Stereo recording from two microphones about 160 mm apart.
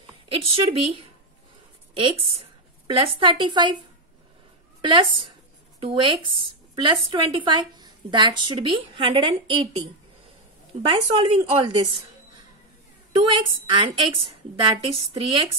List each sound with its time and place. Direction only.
0.3 s a woman's voice: 35° right (ahead or behind)
4.8 s a woman's voice: 30° right (ahead or behind)
10.9 s a woman's voice: 35° right (ahead or behind)
13.1 s a woman's voice: 30° right (ahead or behind)